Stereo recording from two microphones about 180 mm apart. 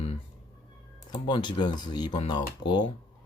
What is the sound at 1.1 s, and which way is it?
Speech, 25° left (ahead or behind).